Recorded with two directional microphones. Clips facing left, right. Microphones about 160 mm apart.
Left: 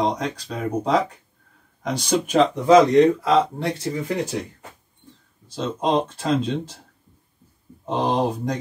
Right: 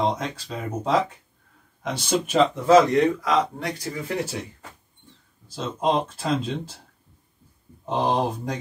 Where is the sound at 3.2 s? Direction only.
30° left (ahead or behind).